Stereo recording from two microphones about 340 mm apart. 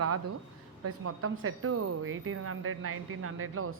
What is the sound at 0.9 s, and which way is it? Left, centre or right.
A woman's voice, right.